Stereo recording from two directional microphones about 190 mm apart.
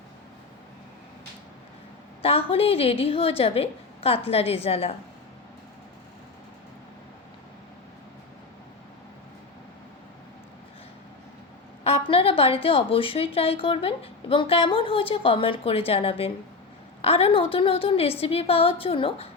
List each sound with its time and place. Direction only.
2.2 s a woman's voice: 30° left (ahead or behind)
11.8 s a woman's voice: 30° left (ahead or behind)